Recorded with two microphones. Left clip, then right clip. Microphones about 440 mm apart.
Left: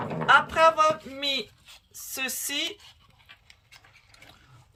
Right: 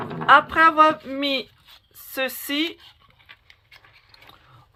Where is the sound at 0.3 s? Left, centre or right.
Centre.